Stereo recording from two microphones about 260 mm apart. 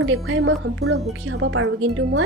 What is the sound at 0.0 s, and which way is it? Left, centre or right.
Speech, right.